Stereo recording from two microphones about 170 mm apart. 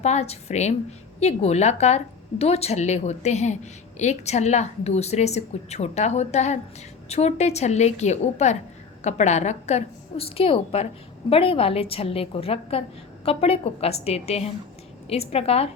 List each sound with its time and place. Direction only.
0.0 s a woman's voice: 40° left (ahead or behind)